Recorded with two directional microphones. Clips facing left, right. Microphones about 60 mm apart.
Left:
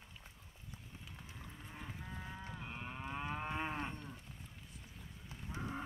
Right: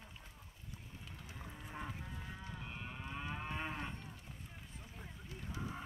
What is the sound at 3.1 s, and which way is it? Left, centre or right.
Moo, centre.